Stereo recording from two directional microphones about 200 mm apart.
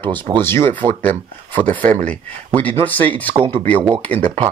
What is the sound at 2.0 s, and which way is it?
Speech, 5° left (ahead or behind).